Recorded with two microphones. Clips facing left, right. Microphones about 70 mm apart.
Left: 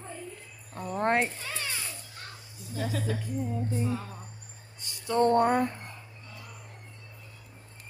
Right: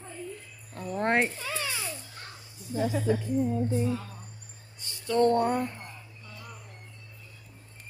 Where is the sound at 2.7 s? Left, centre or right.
Centre.